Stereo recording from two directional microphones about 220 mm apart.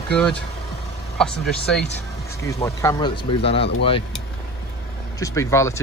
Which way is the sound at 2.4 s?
15° left (ahead or behind).